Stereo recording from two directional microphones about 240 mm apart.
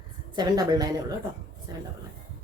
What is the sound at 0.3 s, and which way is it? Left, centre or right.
Speech, centre.